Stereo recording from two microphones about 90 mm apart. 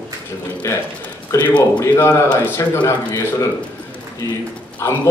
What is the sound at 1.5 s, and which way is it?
A man's voice, 25° left (ahead or behind).